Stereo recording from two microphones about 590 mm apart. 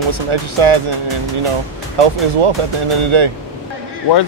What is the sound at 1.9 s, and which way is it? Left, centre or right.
Speech, right.